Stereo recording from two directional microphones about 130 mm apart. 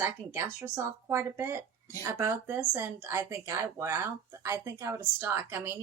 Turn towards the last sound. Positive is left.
turn(degrees=-15)  # may be behind; listen again after turning